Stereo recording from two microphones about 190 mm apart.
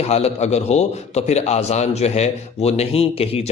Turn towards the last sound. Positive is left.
turn(degrees=30)  # may be behind; listen again after turning